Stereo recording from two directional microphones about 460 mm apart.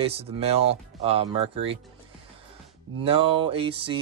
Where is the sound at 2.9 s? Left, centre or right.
Centre.